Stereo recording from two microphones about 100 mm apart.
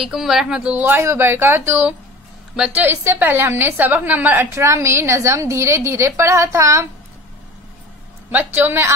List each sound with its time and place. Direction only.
0.0 s speech: 5° right (ahead or behind)
0.8 s a woman's voice: 25° right (ahead or behind)
2.5 s a woman's voice: 10° right (ahead or behind); by 6.9 s 30° right (ahead or behind)
8.5 s a woman's voice: 20° right (ahead or behind)